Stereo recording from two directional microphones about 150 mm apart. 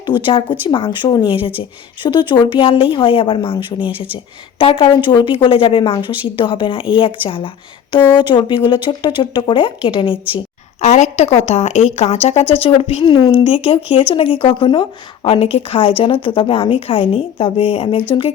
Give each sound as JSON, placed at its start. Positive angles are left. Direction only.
{"t": 0.0, "sound": "a woman's voice", "side_deg": 35}
{"t": 10.8, "sound": "a woman's voice", "side_deg": 50}
{"t": 13.1, "sound": "a woman's voice", "side_deg": 30}